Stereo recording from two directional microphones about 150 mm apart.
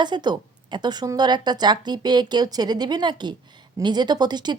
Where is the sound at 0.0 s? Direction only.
30° right (ahead or behind).